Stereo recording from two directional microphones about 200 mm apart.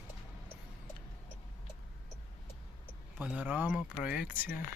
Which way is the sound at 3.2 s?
5° right (ahead or behind).